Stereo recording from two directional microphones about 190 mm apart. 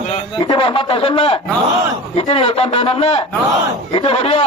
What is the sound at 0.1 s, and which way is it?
A man's voice, 25° left (ahead or behind).